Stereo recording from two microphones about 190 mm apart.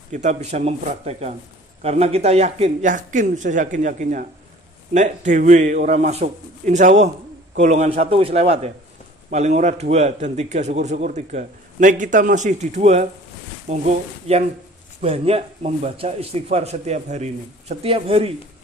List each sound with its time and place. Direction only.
0.1 s a man's voice: 40° right (ahead or behind)